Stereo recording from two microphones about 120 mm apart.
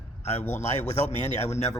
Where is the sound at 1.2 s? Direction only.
65° left (ahead or behind).